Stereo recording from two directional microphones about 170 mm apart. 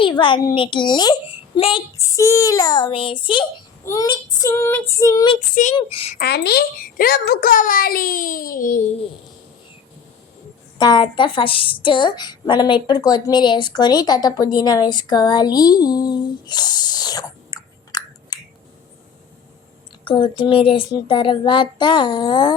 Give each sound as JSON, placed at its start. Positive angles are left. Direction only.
{"t": 0.0, "sound": "a child's voice", "side_deg": 30}
{"t": 2.0, "sound": "a woman's voice", "side_deg": 20}
{"t": 5.7, "sound": "speech", "side_deg": 35}
{"t": 6.1, "sound": "a woman's voice", "side_deg": 70}
{"t": 10.8, "sound": "a woman's voice", "side_deg": 25}
{"t": 20.1, "sound": "a woman's voice", "side_deg": 30}